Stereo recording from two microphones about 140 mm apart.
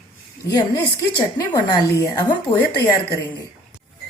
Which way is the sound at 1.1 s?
30° left (ahead or behind).